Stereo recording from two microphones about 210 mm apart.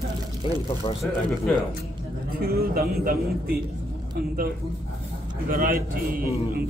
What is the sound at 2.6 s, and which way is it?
Speech, 45° right (ahead or behind).